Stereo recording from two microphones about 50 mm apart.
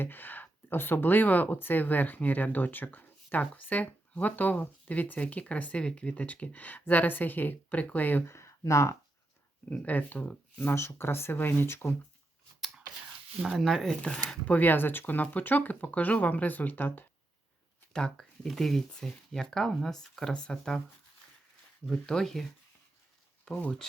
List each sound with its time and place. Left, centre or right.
0.0 s speech: left
8.3 s speech: left
9.8 s speech: left
10.8 s speech: left
12.5 s a sound: centre
13.4 s speech: centre
13.7 s speech: centre
14.4 s speech: left
17.9 s speech: centre
21.8 s speech: centre
23.5 s speech: centre